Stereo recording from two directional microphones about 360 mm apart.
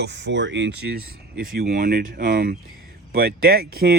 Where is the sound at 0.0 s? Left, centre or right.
Right.